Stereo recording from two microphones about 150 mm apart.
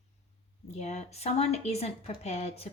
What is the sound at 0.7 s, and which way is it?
A woman's voice, 50° left (ahead or behind).